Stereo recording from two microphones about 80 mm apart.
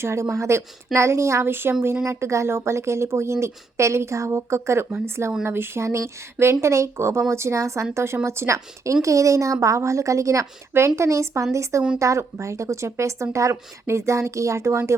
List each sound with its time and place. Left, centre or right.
0.0 s a woman's voice: right